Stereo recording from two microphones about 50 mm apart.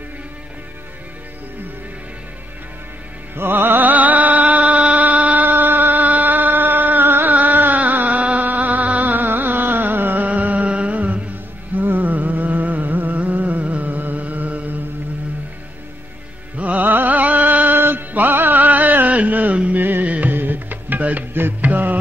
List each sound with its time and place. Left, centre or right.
3.3 s music: right
5.5 s a sound: right
8.5 s music: right
10.2 s music: right
16.5 s music: right
19.8 s music: right
20.1 s music: right